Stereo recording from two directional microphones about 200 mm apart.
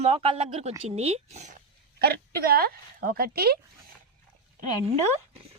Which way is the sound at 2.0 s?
50° right (ahead or behind).